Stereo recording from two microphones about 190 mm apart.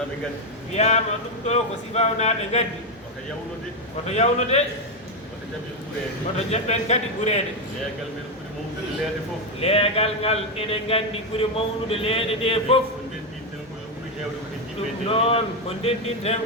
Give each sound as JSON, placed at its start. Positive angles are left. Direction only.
{"t": 0.7, "sound": "a man's voice", "side_deg": 35}
{"t": 4.1, "sound": "a man's voice", "side_deg": 35}
{"t": 6.5, "sound": "a man's voice", "side_deg": 35}
{"t": 9.6, "sound": "a man's voice", "side_deg": 30}
{"t": 15.0, "sound": "a man's voice", "side_deg": 30}